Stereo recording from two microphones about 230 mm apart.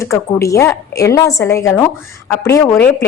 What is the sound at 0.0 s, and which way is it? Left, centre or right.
A woman's voice, centre.